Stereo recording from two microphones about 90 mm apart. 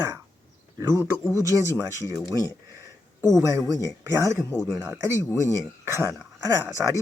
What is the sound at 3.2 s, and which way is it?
Speech, 35° right (ahead or behind).